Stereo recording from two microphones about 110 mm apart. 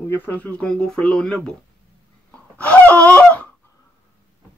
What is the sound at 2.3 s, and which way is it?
Laughter, 10° left (ahead or behind).